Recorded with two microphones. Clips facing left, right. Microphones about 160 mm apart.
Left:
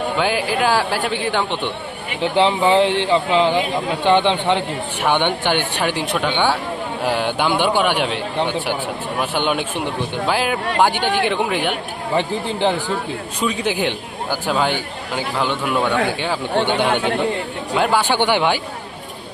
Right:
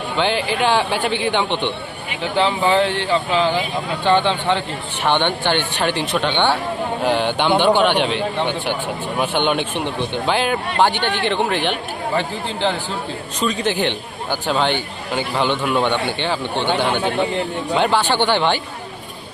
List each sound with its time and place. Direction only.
0.2 s a man's voice: 5° left (ahead or behind)
2.3 s a man's voice: 20° left (ahead or behind); by 16.4 s 5° left (ahead or behind)
17.7 s speech: 5° left (ahead or behind)